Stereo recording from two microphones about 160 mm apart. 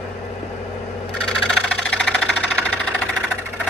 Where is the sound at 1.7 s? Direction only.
5° left (ahead or behind).